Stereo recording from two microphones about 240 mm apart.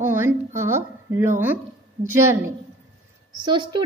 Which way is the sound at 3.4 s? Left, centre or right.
Centre.